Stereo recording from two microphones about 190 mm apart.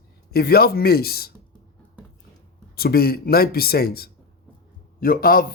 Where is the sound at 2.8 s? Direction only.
55° left (ahead or behind).